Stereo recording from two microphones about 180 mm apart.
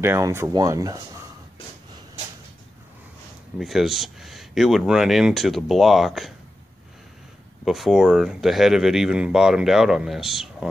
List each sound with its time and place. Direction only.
0.0 s speech: 15° right (ahead or behind)
3.5 s speech: centre (ahead or behind)
7.6 s speech: centre (ahead or behind)